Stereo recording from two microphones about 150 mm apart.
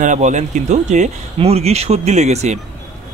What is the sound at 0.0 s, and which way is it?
A man's voice, 55° right (ahead or behind).